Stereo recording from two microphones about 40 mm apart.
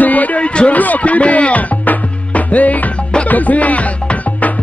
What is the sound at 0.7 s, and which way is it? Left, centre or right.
Music, left.